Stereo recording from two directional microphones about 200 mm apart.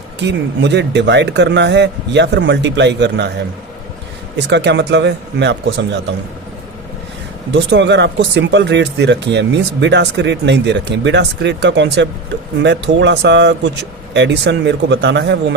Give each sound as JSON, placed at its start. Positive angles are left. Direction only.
{"t": 0.3, "sound": "speech", "side_deg": -60}
{"t": 4.4, "sound": "speech", "side_deg": -60}
{"t": 7.5, "sound": "speech", "side_deg": -60}